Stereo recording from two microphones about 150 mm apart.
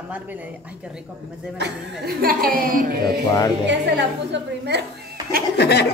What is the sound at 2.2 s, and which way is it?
Speech, 75° right (ahead or behind).